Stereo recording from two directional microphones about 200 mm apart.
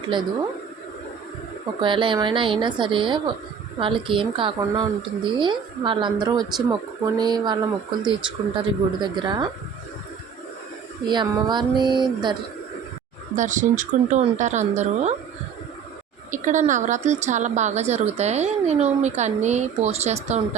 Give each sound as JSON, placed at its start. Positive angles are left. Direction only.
{"t": 0.1, "sound": "a woman's voice", "side_deg": -25}
{"t": 1.8, "sound": "a woman's voice", "side_deg": -25}
{"t": 11.1, "sound": "a woman's voice", "side_deg": -20}
{"t": 13.3, "sound": "a woman's voice", "side_deg": -40}
{"t": 16.3, "sound": "a woman's voice", "side_deg": -40}